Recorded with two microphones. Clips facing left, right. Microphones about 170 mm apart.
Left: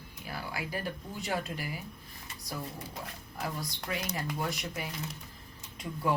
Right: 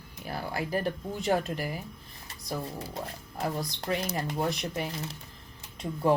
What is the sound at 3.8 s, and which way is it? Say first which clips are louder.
Speech: right 4 dB; 30° right (ahead or behind).